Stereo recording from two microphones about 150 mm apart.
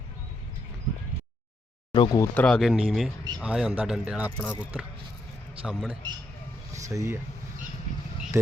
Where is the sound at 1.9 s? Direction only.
35° left (ahead or behind).